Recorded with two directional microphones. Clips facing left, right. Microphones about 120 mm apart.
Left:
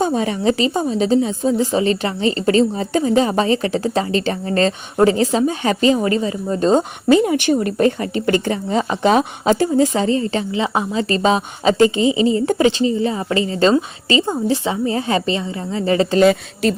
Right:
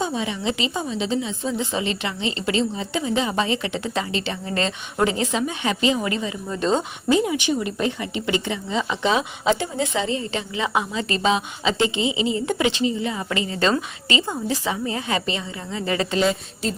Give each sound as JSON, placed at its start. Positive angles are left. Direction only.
{"t": 0.0, "sound": "a woman's voice", "side_deg": 45}
{"t": 7.1, "sound": "a woman's voice", "side_deg": 55}
{"t": 16.2, "sound": "a woman's voice", "side_deg": 70}